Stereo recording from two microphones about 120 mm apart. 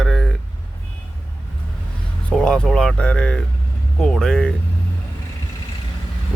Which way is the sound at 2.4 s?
5° left (ahead or behind).